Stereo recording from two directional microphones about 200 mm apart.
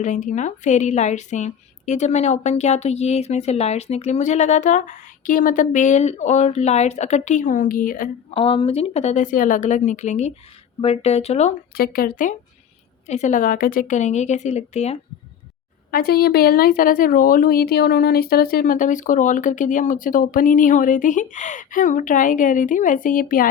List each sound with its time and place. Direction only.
0.0 s a woman's voice: 40° left (ahead or behind)
8.3 s a woman's voice: 25° left (ahead or behind)
11.8 s a woman's voice: 45° left (ahead or behind)
15.9 s a woman's voice: 50° left (ahead or behind)